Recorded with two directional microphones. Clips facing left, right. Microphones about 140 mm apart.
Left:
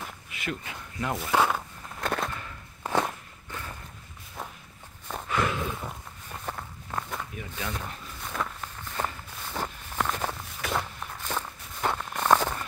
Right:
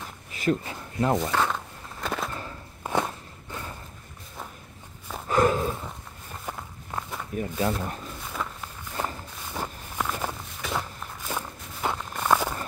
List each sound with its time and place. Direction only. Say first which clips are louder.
0.3 s speech: right 10 dB; 35° right (ahead or behind)
1.3 s speech: left 2 dB; 10° left (ahead or behind)
2.0 s a sound: left 1 dB; centre (ahead or behind)
2.8 s walk: even; 15° right (ahead or behind)
5.3 s snort: right 7 dB; 40° right (ahead or behind)
6.4 s walk: even; 10° right (ahead or behind)
7.3 s speech: right 9 dB; 40° right (ahead or behind)
8.3 s walk: left 2 dB; 5° right (ahead or behind)